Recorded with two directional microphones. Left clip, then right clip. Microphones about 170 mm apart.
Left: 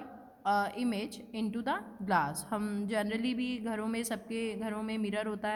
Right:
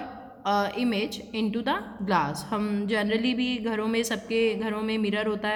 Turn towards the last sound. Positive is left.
turn(degrees=30)  # may be behind; listen again after turning